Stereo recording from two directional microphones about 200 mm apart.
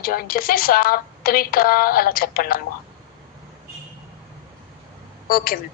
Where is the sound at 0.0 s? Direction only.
45° left (ahead or behind).